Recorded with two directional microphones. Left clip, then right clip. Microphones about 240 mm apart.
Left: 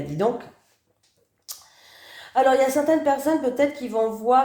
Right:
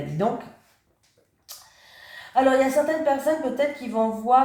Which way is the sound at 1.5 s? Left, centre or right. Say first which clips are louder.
Left 3 dB; left.